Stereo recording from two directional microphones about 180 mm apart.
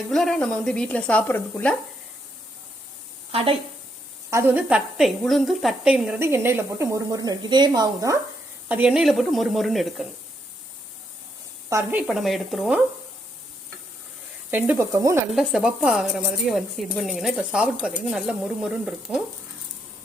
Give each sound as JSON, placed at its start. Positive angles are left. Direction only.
{"t": 0.1, "sound": "speech", "side_deg": 0}
{"t": 3.3, "sound": "a woman's voice", "side_deg": -30}
{"t": 4.3, "sound": "speech", "side_deg": -15}
{"t": 8.7, "sound": "speech", "side_deg": -5}
{"t": 11.7, "sound": "speech", "side_deg": -10}
{"t": 14.5, "sound": "speech", "side_deg": -15}
{"t": 15.3, "sound": "speech", "side_deg": 0}